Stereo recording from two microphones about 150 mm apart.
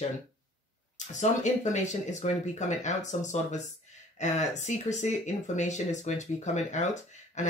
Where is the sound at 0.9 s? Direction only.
50° left (ahead or behind).